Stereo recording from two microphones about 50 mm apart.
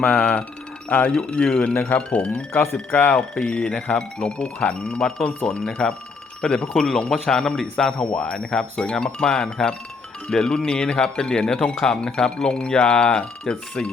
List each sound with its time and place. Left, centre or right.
0.0 s speech: centre